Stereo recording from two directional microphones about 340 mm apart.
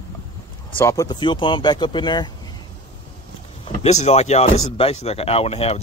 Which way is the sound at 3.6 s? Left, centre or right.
Centre.